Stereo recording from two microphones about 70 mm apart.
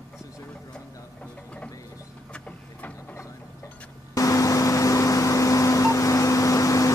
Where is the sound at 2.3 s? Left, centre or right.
Centre.